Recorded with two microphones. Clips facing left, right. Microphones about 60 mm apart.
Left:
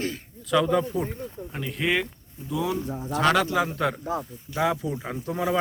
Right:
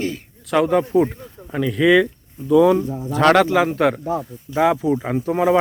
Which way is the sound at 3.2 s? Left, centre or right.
Right.